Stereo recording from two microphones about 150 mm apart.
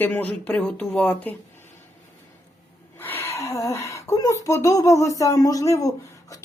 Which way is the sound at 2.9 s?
15° left (ahead or behind).